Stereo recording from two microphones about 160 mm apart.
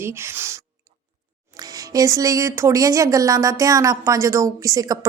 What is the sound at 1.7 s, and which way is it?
A woman's voice, 20° right (ahead or behind).